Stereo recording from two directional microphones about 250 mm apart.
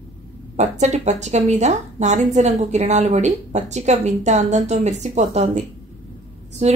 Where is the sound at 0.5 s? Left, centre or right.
Right.